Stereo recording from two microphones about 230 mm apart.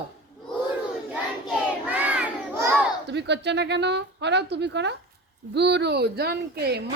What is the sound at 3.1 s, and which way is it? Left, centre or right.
Speech, right.